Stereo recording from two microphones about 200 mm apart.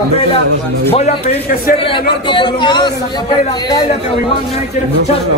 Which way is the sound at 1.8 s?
25° left (ahead or behind).